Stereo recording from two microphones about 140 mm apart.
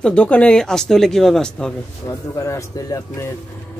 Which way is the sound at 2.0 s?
20° left (ahead or behind).